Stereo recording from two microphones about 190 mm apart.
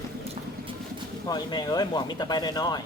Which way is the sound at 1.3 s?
20° left (ahead or behind).